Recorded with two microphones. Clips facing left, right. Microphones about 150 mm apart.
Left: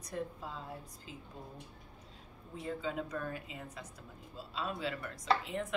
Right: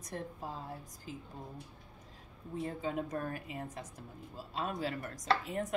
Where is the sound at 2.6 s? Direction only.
45° right (ahead or behind).